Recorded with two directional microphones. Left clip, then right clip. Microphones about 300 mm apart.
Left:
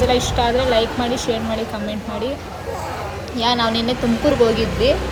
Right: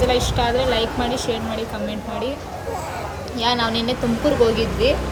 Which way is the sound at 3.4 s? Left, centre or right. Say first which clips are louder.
Left 2 dB; centre.